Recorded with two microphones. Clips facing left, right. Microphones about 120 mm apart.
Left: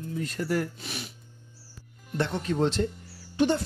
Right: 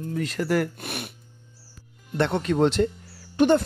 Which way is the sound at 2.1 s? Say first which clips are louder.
Right 5 dB; 70° right (ahead or behind).